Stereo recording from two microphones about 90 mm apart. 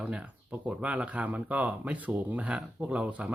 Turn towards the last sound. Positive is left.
turn(degrees=-15)  # may be behind; listen again after turning